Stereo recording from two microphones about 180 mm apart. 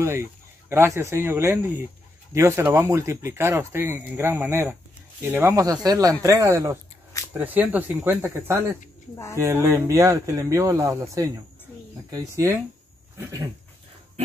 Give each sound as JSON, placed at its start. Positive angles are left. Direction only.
{"t": 0.0, "sound": "speech", "side_deg": -15}